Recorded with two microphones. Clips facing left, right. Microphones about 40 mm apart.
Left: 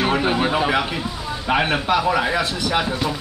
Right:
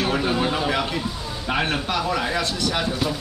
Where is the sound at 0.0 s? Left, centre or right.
Left.